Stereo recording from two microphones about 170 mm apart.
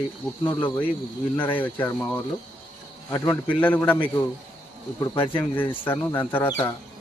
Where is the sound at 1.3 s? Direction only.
10° left (ahead or behind).